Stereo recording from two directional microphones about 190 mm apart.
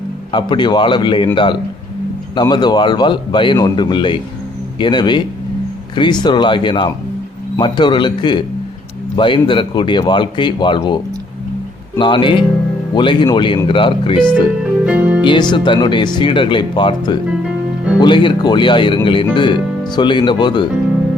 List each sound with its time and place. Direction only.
0.3 s speech: 25° left (ahead or behind)
2.3 s speech: 20° left (ahead or behind)
14.8 s music: 5° right (ahead or behind)
15.2 s speech: 25° left (ahead or behind)